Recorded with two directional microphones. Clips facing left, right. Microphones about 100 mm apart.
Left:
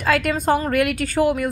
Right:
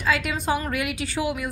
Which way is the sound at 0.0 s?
50° left (ahead or behind).